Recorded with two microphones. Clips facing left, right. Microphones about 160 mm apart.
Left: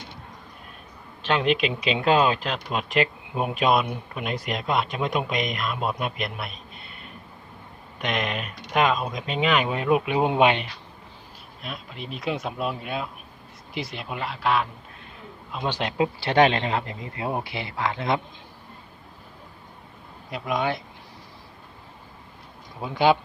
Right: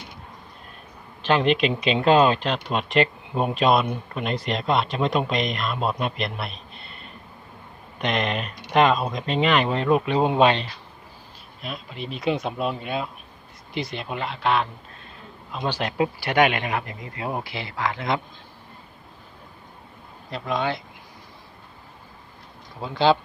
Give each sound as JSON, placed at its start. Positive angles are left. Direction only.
{"t": 1.2, "sound": "speech", "side_deg": 0}
{"t": 6.7, "sound": "a sound", "side_deg": 5}
{"t": 8.0, "sound": "speech", "side_deg": 5}
{"t": 11.6, "sound": "speech", "side_deg": 0}
{"t": 15.6, "sound": "speech", "side_deg": 20}
{"t": 20.3, "sound": "speech", "side_deg": 15}
{"t": 22.8, "sound": "speech", "side_deg": 15}